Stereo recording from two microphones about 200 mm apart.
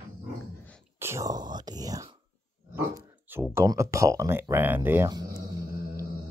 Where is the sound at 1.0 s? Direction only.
15° right (ahead or behind).